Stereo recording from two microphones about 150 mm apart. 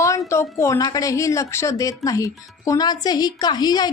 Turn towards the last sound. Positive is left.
turn(degrees=25)  # may be behind; listen again after turning